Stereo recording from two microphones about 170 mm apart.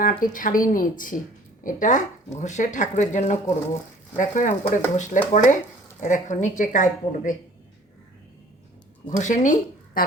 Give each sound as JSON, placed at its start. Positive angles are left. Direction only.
{"t": 0.0, "sound": "speech", "side_deg": 55}
{"t": 9.0, "sound": "speech", "side_deg": 45}